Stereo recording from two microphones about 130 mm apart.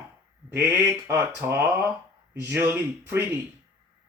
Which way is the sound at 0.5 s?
20° right (ahead or behind).